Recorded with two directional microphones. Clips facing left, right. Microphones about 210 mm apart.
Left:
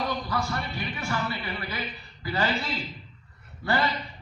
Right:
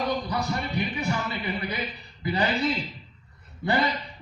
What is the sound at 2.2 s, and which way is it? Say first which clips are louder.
Speech: right 2 dB; 20° right (ahead or behind).